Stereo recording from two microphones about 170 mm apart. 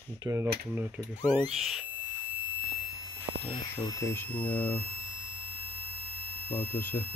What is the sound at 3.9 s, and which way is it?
Speech, 15° left (ahead or behind).